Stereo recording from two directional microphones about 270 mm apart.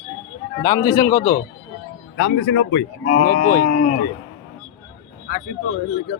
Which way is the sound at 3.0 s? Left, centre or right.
Left.